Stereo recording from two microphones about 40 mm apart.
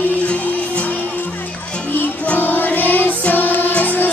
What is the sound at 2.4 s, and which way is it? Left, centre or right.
Music, left.